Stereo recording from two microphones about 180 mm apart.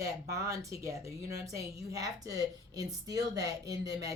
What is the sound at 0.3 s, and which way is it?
A woman's voice, 15° right (ahead or behind).